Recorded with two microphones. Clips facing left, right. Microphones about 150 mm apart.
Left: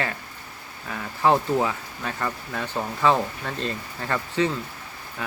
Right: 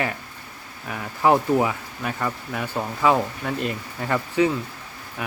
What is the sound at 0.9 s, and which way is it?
Speech, 15° right (ahead or behind).